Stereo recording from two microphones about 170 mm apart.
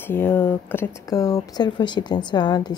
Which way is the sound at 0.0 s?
10° left (ahead or behind).